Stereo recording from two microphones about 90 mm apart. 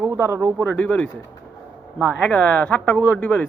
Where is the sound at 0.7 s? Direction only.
15° left (ahead or behind).